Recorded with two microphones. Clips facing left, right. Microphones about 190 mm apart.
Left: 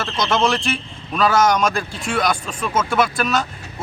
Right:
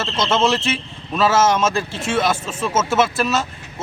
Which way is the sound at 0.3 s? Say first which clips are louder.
Right 1 dB; 20° right (ahead or behind).